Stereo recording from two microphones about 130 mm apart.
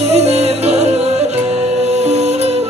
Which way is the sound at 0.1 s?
55° right (ahead or behind).